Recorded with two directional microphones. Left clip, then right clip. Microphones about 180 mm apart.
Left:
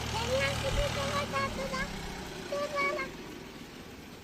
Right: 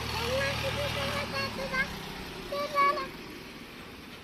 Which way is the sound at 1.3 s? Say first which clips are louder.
Even; 25° right (ahead or behind).